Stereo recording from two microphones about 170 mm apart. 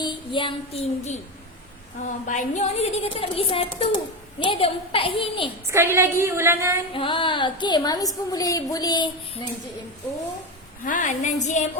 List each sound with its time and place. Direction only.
0.0 s child singing: 30° left (ahead or behind)
2.0 s a woman's voice: 45° left (ahead or behind); by 5.5 s 30° left (ahead or behind)
5.7 s a woman's voice: 15° right (ahead or behind)
6.9 s a woman's voice: 30° left (ahead or behind)
10.8 s a woman's voice: 50° left (ahead or behind)